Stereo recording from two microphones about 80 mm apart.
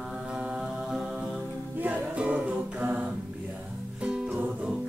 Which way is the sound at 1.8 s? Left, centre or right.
Centre.